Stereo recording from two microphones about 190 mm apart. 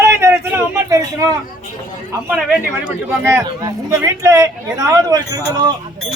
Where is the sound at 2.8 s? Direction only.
10° right (ahead or behind).